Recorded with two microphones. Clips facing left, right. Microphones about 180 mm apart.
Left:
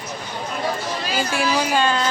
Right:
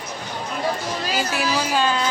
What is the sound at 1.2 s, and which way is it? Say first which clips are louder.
Speech: left 3 dB; 5° right (ahead or behind).